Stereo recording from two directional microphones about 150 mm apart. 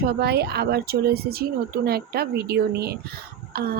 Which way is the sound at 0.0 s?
90° right.